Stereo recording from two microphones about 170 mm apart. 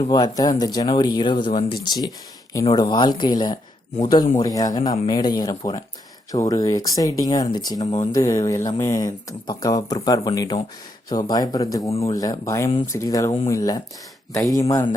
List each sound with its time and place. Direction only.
0.1 s speech: 20° left (ahead or behind)